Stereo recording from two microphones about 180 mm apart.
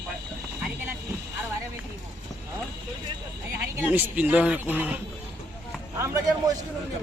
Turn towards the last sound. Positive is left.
turn(degrees=-15)  # may be behind; listen again after turning